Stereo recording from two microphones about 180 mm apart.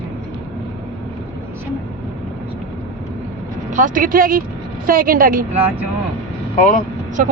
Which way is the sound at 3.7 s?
50° right (ahead or behind).